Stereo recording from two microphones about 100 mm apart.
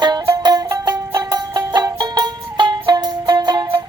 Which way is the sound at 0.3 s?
40° right (ahead or behind).